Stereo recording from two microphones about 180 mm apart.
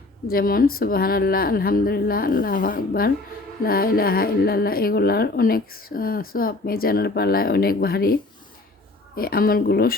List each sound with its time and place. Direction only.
0.3 s a woman's voice: 55° left (ahead or behind)